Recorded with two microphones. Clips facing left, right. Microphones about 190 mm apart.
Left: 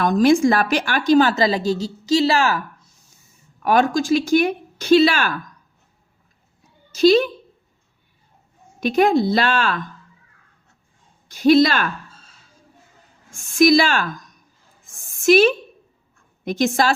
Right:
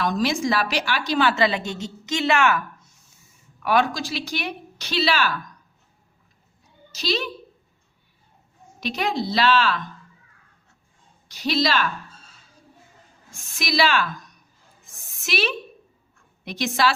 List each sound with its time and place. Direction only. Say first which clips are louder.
0.0 s a woman's voice: left 8 dB; 50° left (ahead or behind)
3.6 s a woman's voice: left 4 dB; 45° left (ahead or behind)
6.9 s a woman's voice: left 13 dB; 50° left (ahead or behind)
8.8 s a woman's voice: left 9 dB; 50° left (ahead or behind)
11.3 s a woman's voice: left 9 dB; 50° left (ahead or behind)
13.3 s a woman's voice: left 12 dB; 50° left (ahead or behind)
14.8 s a sound: left 16 dB; 50° left (ahead or behind)
16.4 s a woman's voice: left 4 dB; 45° left (ahead or behind)